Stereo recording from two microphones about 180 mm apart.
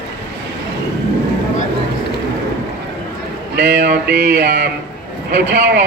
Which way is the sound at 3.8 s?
65° right (ahead or behind).